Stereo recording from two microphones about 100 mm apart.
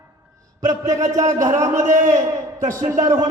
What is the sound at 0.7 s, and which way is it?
A man's voice, 35° right (ahead or behind).